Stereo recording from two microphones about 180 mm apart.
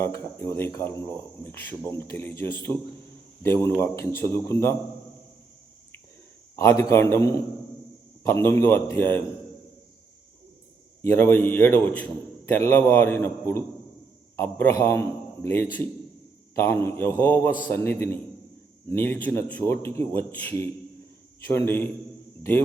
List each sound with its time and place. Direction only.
0.0 s speech: 15° left (ahead or behind)
6.6 s speech: 15° left (ahead or behind)
11.0 s speech: 15° left (ahead or behind)